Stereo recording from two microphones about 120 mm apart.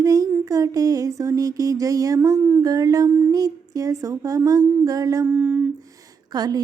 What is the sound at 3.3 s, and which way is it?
Humming, 30° right (ahead or behind).